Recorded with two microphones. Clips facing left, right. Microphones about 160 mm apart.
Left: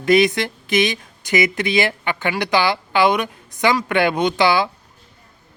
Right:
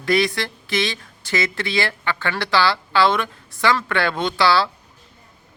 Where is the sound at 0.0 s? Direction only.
20° left (ahead or behind).